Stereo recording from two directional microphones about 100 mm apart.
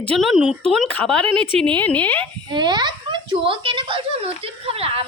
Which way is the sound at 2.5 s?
50° right (ahead or behind).